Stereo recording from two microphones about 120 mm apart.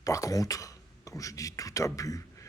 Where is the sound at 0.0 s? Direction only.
30° left (ahead or behind).